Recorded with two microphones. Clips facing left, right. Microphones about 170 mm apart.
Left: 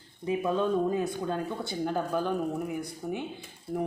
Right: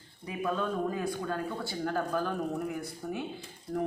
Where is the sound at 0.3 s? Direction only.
25° left (ahead or behind).